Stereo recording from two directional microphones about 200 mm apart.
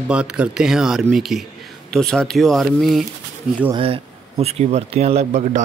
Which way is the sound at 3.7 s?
30° right (ahead or behind).